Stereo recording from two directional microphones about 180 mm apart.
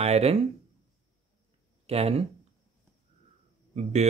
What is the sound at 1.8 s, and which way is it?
Speech, 35° right (ahead or behind).